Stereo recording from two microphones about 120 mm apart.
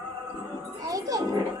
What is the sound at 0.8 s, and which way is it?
Music, 30° right (ahead or behind).